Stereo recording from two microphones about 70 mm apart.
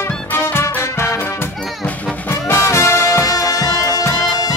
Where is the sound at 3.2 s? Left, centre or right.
Left.